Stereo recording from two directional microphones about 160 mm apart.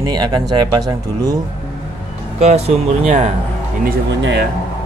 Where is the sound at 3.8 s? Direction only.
75° right (ahead or behind).